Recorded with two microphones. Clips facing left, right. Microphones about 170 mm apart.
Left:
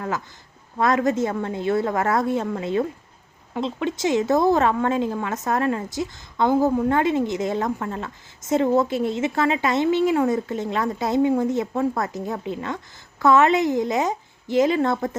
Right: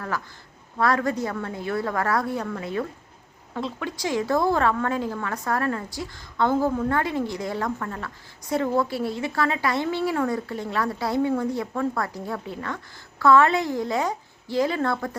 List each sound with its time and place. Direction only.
0.8 s a woman's voice: 20° left (ahead or behind)